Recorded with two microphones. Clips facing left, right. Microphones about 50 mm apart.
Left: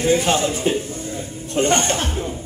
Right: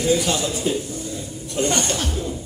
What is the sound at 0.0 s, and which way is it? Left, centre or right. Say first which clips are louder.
A man's voice: left 3 dB; left.